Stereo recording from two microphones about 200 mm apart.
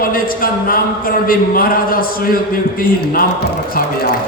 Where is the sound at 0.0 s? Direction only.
45° left (ahead or behind).